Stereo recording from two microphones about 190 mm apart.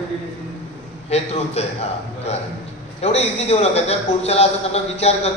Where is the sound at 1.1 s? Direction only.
35° left (ahead or behind).